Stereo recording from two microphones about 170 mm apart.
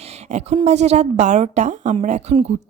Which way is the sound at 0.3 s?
40° right (ahead or behind).